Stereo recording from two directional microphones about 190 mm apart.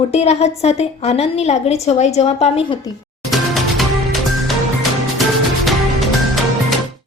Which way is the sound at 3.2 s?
Centre (ahead or behind).